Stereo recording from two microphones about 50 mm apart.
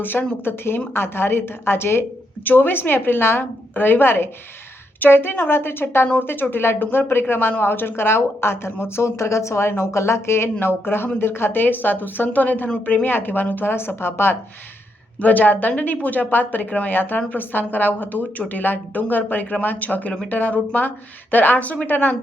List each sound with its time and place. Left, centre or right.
0.0 s a woman's voice: left
15.2 s a woman's voice: left